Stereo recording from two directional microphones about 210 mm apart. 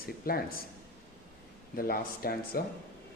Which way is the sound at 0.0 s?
45° left (ahead or behind).